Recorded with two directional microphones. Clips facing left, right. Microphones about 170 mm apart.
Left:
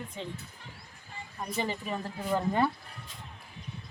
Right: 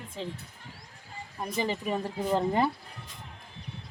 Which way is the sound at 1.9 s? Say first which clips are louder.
Right 3 dB; 20° right (ahead or behind).